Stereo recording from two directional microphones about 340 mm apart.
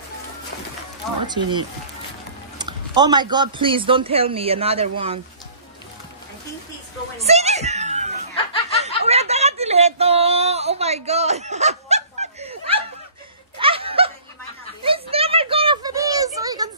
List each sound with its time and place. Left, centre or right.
1.2 s speech: centre
2.6 s speech: centre
7.2 s screaming: centre
8.8 s a sound: centre
11.1 s snicker: centre
14.8 s a sound: centre